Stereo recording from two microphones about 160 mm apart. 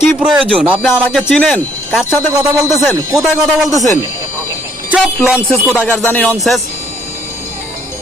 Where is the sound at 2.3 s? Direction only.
20° right (ahead or behind).